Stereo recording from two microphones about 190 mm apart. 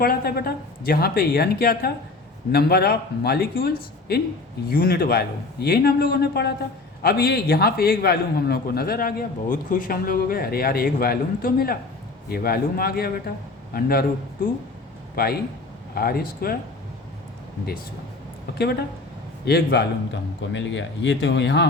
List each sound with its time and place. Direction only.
0.0 s a man's voice: 55° left (ahead or behind)
15.1 s a man's voice: 50° left (ahead or behind)
18.5 s a man's voice: 60° left (ahead or behind)
20.5 s speech: 70° left (ahead or behind)